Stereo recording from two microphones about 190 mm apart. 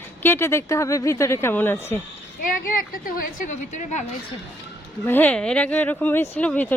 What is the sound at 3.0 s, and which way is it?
A woman's voice, 45° left (ahead or behind).